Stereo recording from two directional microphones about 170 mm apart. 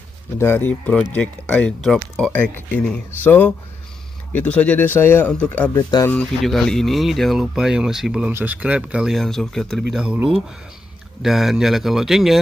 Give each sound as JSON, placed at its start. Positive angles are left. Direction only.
{"t": 0.4, "sound": "speech", "side_deg": 15}
{"t": 5.8, "sound": "speech", "side_deg": 25}
{"t": 6.0, "sound": "speech", "side_deg": 5}
{"t": 11.2, "sound": "speech", "side_deg": 0}